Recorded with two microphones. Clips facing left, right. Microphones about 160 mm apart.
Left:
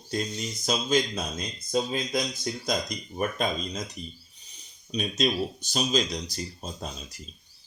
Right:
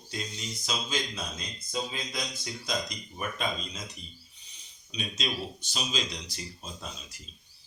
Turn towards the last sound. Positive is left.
turn(degrees=40)  # may be behind; listen again after turning